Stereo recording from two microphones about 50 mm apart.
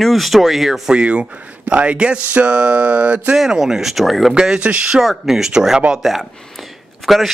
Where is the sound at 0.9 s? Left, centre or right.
Right.